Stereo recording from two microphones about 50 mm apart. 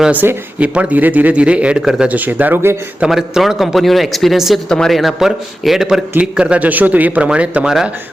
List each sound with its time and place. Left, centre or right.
0.2 s speech: right
0.6 s speech: right
1.8 s speech: centre
2.0 s speech: right
3.1 s a man's voice: centre
4.7 s a man's voice: centre
6.3 s speech: right